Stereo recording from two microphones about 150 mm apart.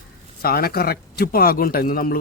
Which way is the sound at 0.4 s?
90° left.